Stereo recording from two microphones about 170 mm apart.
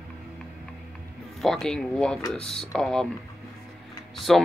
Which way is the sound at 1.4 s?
5° left (ahead or behind).